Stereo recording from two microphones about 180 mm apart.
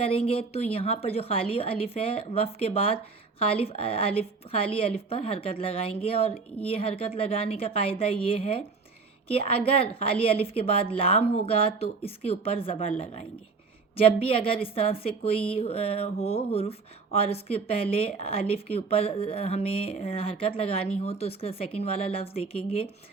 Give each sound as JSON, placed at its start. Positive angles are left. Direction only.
{"t": 0.0, "sound": "a woman's voice", "side_deg": 30}
{"t": 13.9, "sound": "a woman's voice", "side_deg": 30}